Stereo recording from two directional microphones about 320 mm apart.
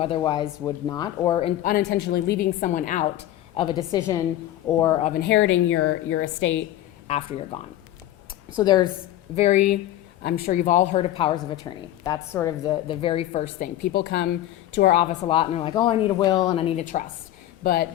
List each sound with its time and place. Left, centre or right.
0.0 s a woman's voice: centre; by 6.5 s left
7.1 s a woman's voice: centre